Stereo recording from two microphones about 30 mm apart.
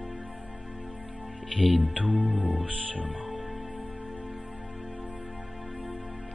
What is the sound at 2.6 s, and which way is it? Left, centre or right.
Speech, right.